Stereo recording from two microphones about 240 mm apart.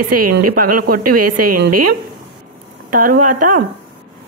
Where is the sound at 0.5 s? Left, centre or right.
Right.